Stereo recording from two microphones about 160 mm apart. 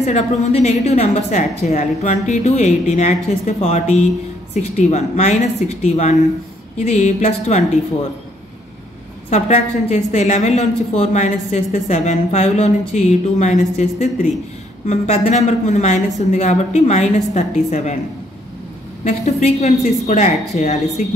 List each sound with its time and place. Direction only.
0.0 s a woman's voice: 45° left (ahead or behind)
9.3 s a woman's voice: 45° left (ahead or behind)
19.0 s a woman's voice: 45° left (ahead or behind)